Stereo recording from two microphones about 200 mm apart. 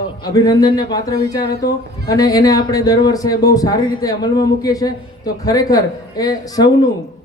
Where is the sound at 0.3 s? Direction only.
20° left (ahead or behind).